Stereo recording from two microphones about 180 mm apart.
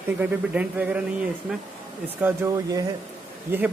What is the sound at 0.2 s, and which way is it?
A man's voice, 10° right (ahead or behind).